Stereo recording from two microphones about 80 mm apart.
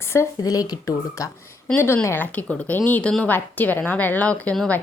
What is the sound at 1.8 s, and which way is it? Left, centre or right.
A woman's voice, left.